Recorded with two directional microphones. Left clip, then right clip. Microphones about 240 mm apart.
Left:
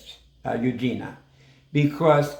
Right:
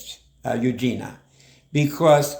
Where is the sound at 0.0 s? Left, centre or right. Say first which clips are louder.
Right 2 dB; right.